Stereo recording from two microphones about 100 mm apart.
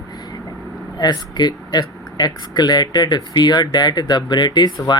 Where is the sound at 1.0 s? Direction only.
45° left (ahead or behind).